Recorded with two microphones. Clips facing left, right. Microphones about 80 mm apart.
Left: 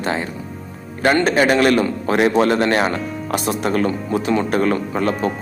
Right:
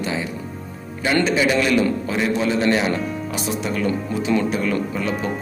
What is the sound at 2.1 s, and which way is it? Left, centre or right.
Speech, left.